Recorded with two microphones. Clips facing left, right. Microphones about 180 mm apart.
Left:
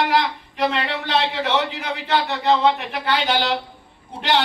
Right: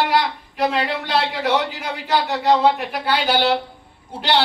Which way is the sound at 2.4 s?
10° right (ahead or behind).